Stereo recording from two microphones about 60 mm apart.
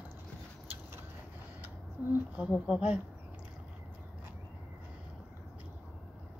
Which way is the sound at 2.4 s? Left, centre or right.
Centre.